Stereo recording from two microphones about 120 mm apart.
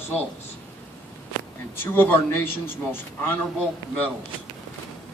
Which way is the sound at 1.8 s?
15° left (ahead or behind).